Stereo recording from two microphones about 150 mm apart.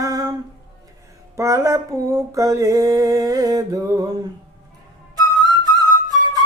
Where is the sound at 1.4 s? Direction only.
20° right (ahead or behind).